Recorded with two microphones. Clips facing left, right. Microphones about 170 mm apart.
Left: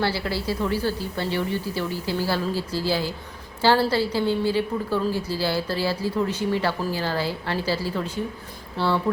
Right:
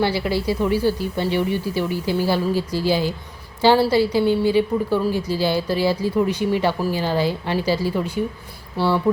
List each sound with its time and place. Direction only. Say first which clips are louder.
0.0 s a woman's voice: right 5 dB; 15° right (ahead or behind)